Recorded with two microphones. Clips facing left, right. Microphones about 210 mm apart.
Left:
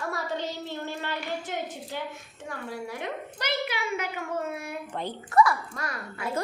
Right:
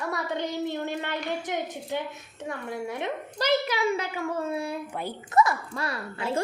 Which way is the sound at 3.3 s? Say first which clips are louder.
Right 8 dB; 35° right (ahead or behind).